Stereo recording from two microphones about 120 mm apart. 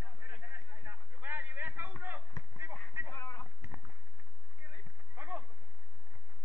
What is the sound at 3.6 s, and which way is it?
Clip-clop, 25° right (ahead or behind).